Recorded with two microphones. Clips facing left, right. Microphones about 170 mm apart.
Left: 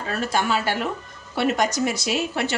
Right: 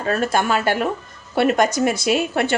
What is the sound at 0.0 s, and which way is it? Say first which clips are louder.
Speech: right 5 dB; 50° right (ahead or behind).